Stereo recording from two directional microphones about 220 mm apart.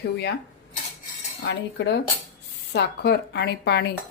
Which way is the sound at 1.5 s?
50° left (ahead or behind).